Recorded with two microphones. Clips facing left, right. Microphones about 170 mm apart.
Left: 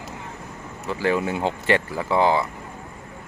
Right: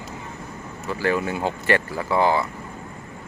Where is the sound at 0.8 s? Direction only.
15° left (ahead or behind).